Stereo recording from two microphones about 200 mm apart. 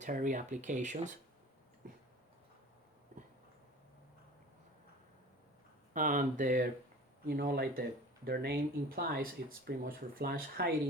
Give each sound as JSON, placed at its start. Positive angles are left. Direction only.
{"t": 0.0, "sound": "speech", "side_deg": -40}
{"t": 3.1, "sound": "a sound", "side_deg": -40}
{"t": 5.9, "sound": "speech", "side_deg": -40}